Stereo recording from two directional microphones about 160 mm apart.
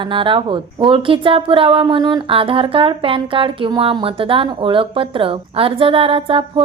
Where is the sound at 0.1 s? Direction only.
30° right (ahead or behind).